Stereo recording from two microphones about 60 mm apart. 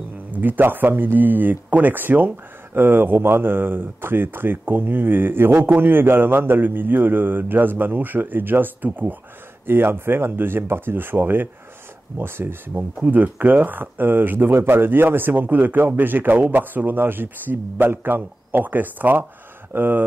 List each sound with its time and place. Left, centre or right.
0.3 s speech: right
12.7 s speech: right
14.5 s speech: right